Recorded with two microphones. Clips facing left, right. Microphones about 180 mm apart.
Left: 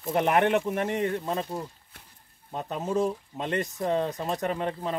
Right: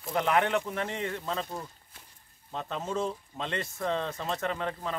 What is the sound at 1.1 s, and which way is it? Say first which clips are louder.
Speech: left 4 dB; 15° left (ahead or behind).